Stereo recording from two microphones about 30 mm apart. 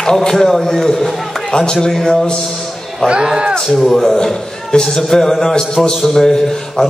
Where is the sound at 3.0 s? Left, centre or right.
Right.